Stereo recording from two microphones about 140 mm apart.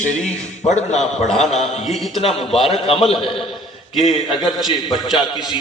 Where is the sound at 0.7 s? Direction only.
55° left (ahead or behind).